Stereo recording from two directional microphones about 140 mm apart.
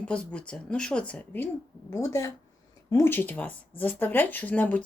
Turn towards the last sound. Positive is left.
turn(degrees=10)  # may be behind; listen again after turning